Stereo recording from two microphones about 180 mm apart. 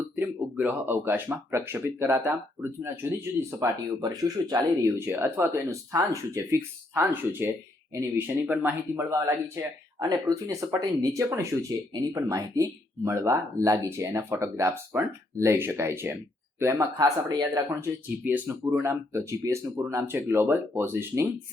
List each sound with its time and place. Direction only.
0.2 s speech: 10° right (ahead or behind)